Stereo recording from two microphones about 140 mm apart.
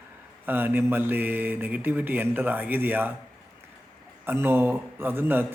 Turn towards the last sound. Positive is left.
turn(degrees=-15)  # may be behind; listen again after turning